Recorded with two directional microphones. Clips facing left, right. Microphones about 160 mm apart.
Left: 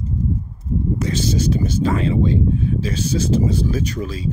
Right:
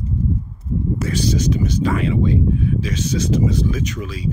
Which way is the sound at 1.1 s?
25° left (ahead or behind).